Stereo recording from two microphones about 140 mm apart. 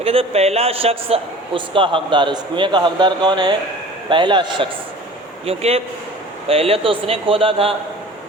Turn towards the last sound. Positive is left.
turn(degrees=-40)  # may be behind; listen again after turning